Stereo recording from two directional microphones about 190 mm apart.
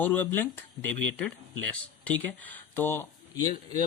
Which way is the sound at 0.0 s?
10° left (ahead or behind).